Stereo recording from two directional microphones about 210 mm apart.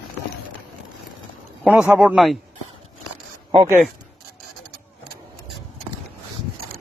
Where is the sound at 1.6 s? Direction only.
5° right (ahead or behind).